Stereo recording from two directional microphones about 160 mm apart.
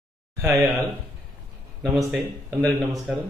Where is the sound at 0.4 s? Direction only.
15° right (ahead or behind).